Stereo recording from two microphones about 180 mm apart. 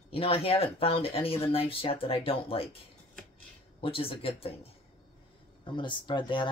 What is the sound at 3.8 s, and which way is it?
Speech, 30° left (ahead or behind).